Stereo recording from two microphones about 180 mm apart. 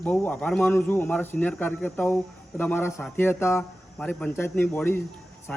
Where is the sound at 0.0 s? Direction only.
10° left (ahead or behind).